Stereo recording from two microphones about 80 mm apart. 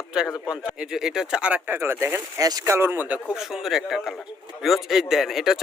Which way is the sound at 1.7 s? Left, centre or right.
Right.